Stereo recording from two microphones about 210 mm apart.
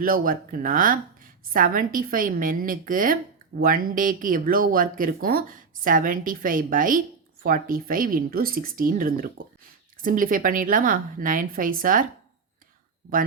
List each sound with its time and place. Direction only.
0.0 s speech: 40° right (ahead or behind)